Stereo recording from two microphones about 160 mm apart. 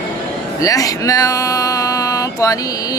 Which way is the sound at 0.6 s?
20° left (ahead or behind).